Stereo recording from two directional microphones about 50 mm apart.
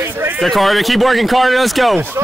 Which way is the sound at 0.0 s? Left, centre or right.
Right.